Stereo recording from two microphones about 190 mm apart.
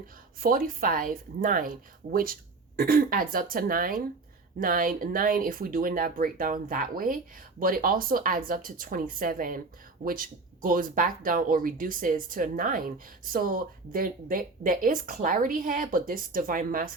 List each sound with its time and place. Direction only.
0.4 s speech: 45° right (ahead or behind)